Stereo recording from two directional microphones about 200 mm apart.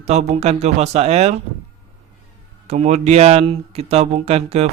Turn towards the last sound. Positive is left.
turn(degrees=-30)  # may be behind; listen again after turning